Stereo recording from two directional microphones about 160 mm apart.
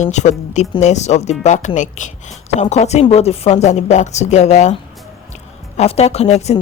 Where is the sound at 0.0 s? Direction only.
45° left (ahead or behind).